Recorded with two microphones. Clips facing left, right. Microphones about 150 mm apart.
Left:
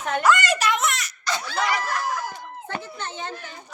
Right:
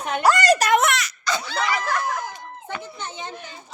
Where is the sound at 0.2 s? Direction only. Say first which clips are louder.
Right 4 dB; 35° right (ahead or behind).